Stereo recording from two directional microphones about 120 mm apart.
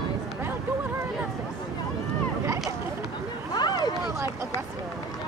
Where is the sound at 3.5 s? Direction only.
35° left (ahead or behind).